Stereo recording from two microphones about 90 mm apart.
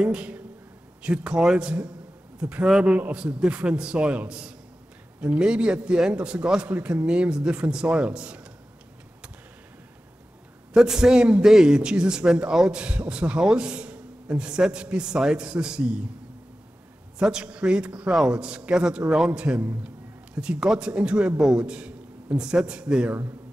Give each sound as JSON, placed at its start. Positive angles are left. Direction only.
{"t": 0.0, "sound": "a man's voice", "side_deg": -10}
{"t": 10.7, "sound": "a man's voice", "side_deg": -5}
{"t": 17.2, "sound": "a man's voice", "side_deg": -10}